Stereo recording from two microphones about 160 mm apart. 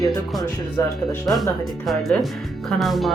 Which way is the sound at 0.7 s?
20° left (ahead or behind).